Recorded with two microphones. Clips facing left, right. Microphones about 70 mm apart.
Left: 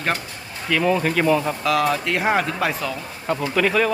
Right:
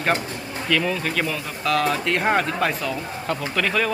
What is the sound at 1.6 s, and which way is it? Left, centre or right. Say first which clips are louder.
Speech: right 3 dB; centre.